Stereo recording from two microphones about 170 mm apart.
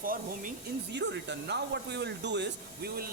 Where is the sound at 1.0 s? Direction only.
90° right.